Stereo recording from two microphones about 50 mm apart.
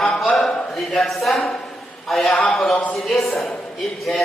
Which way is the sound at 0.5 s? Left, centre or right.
Left.